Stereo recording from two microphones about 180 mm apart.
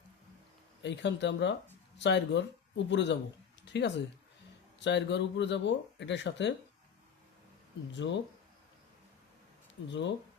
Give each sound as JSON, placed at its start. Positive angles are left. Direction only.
{"t": 0.8, "sound": "speech", "side_deg": 80}
{"t": 7.9, "sound": "speech", "side_deg": 85}
{"t": 9.9, "sound": "speech", "side_deg": 80}